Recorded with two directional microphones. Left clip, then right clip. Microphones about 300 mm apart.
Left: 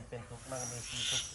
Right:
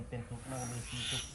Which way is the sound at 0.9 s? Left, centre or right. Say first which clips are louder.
Left 4 dB; centre.